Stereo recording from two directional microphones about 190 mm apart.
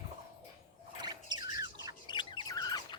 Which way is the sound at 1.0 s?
20° right (ahead or behind).